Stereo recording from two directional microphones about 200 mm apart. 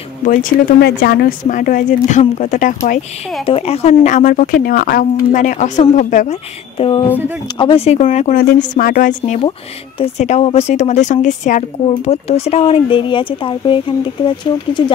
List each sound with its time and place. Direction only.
0.2 s speech: 40° left (ahead or behind)
0.7 s speech: 55° left (ahead or behind)
3.4 s speech: 30° left (ahead or behind)
7.5 s speech: 25° left (ahead or behind)